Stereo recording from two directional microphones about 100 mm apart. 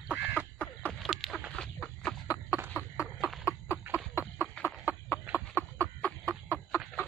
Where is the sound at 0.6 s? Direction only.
15° left (ahead or behind).